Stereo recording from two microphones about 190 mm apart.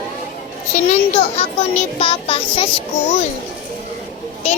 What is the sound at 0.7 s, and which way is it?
Speech, 35° left (ahead or behind).